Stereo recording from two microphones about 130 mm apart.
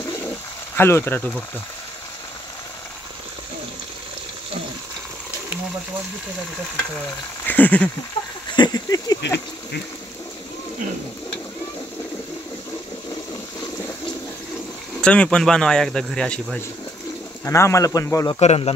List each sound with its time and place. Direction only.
0.7 s speech: 20° left (ahead or behind)
7.4 s speech: 15° left (ahead or behind)
8.5 s speech: 30° left (ahead or behind)
15.0 s speech: 5° left (ahead or behind)
17.5 s a man's voice: 20° left (ahead or behind)
18.4 s speech: 55° left (ahead or behind)